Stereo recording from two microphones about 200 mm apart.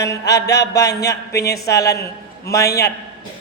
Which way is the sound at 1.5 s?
15° left (ahead or behind).